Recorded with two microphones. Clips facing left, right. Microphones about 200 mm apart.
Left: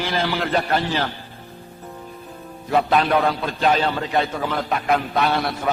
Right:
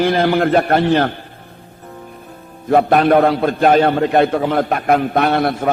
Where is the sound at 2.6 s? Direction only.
55° right (ahead or behind).